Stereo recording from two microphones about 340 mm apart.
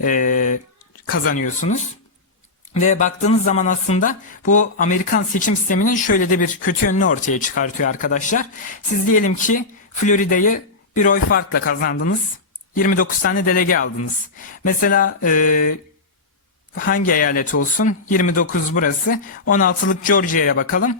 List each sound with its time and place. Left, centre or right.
0.0 s speech: left
16.7 s speech: left